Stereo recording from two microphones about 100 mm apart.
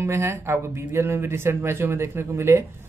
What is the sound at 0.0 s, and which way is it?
A man's voice, 25° right (ahead or behind).